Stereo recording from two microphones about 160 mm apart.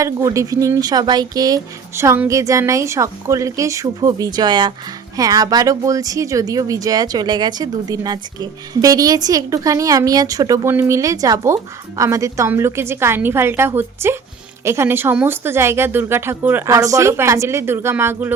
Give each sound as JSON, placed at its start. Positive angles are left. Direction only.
{"t": 0.0, "sound": "speech", "side_deg": -20}